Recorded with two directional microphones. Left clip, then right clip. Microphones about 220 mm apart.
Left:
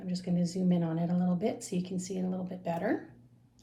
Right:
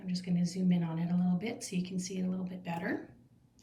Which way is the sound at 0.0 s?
10° left (ahead or behind).